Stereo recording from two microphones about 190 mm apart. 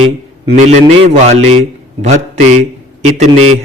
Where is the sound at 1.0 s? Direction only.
35° right (ahead or behind).